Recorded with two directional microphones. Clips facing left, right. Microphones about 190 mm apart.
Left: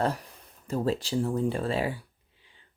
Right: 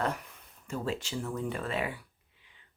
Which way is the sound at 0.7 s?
35° left (ahead or behind).